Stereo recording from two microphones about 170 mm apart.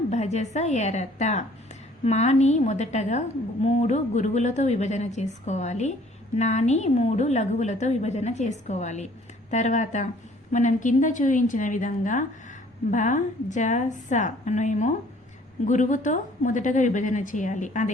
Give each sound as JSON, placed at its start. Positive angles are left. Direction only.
{"t": 0.1, "sound": "a woman's voice", "side_deg": 40}